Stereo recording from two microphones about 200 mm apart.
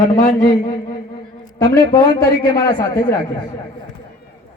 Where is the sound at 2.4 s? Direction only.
20° left (ahead or behind).